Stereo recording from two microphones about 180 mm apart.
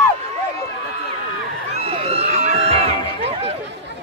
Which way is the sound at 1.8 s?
35° right (ahead or behind).